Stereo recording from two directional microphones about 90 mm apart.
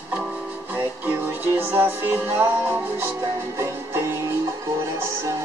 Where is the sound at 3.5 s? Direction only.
30° right (ahead or behind).